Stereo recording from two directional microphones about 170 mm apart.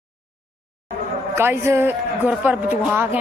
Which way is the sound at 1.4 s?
15° right (ahead or behind).